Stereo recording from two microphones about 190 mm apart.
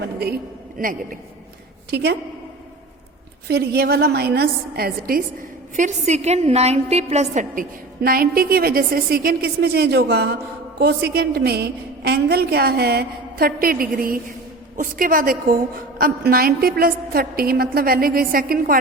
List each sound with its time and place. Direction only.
0.0 s a woman's voice: 60° right (ahead or behind)
1.9 s a woman's voice: 60° right (ahead or behind)
3.5 s a woman's voice: 55° right (ahead or behind)